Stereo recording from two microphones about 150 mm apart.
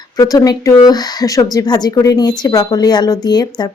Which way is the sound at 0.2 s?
25° left (ahead or behind).